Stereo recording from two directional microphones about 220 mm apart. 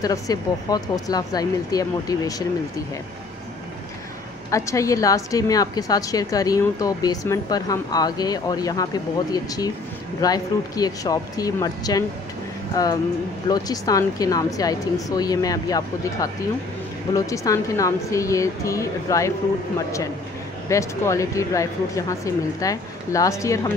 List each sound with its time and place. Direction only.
0.0 s a woman's voice: 15° left (ahead or behind)
4.5 s a woman's voice: 15° left (ahead or behind)
20.6 s a woman's voice: 10° left (ahead or behind)